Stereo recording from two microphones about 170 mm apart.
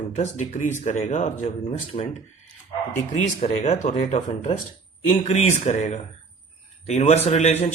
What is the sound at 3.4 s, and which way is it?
A man's voice, 40° left (ahead or behind).